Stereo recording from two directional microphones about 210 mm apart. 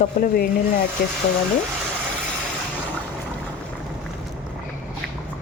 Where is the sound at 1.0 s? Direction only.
40° left (ahead or behind).